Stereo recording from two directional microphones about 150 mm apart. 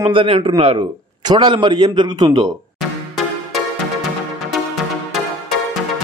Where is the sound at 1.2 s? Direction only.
30° right (ahead or behind).